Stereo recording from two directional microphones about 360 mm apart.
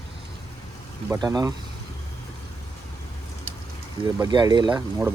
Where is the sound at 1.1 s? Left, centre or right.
Centre.